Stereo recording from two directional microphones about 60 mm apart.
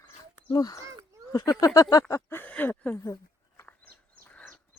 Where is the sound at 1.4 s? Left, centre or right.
Left.